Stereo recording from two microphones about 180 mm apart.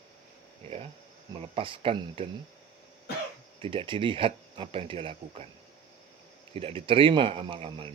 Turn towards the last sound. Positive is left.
turn(degrees=-30)  # may be behind; listen again after turning